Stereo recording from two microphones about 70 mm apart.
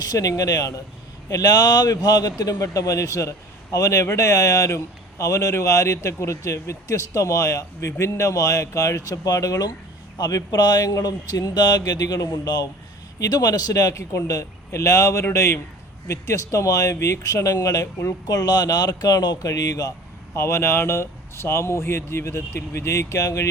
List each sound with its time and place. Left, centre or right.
0.0 s speech: left
2.4 s a man's voice: left
11.9 s speech: left
13.9 s a man's voice: left
20.3 s speech: left